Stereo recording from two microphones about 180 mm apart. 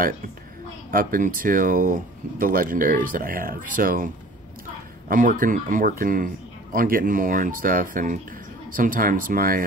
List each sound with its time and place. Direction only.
0.9 s speech: 50° right (ahead or behind)